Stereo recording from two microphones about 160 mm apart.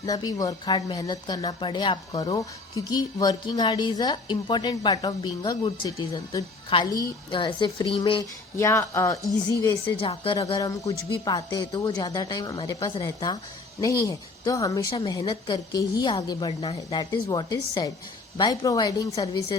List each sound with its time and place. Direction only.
0.0 s a woman's voice: 25° left (ahead or behind)
8.5 s a woman's voice: 20° left (ahead or behind)
9.8 s a woman's voice: 35° left (ahead or behind)
10.5 s a woman's voice: 20° left (ahead or behind)